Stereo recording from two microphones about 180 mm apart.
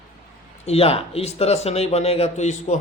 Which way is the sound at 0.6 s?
35° left (ahead or behind).